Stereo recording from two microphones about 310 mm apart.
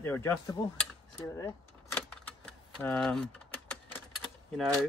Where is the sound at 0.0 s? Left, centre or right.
Centre.